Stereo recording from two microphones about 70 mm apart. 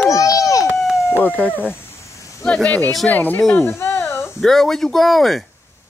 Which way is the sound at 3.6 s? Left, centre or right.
Left.